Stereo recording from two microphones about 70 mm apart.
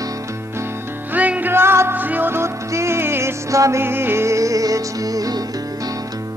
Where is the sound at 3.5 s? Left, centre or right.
Right.